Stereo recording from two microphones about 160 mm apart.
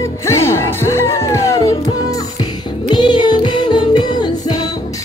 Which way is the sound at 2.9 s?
30° left (ahead or behind).